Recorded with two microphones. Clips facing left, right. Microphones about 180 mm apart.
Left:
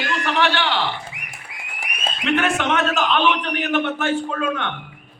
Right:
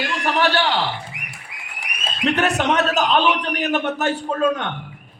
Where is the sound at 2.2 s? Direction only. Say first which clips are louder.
Right 1 dB; 40° right (ahead or behind).